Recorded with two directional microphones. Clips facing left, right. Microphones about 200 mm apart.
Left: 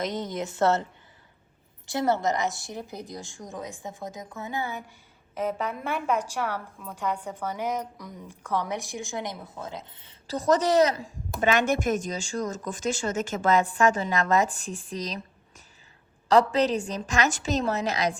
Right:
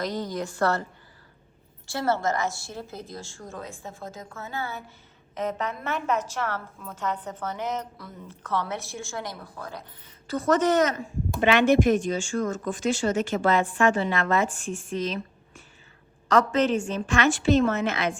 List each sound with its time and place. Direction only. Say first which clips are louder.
0.0 s a woman's voice: right 1 dB; 20° left (ahead or behind)
1.9 s a woman's voice: left 1 dB; 20° left (ahead or behind); by 11.1 s 35° left (ahead or behind)
11.5 s speech: right 8 dB; 45° left (ahead or behind)